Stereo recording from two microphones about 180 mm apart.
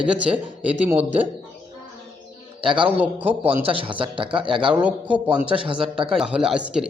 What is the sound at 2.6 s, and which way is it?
Speech, 30° right (ahead or behind).